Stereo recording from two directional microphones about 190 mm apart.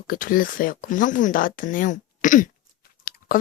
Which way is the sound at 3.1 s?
45° left (ahead or behind).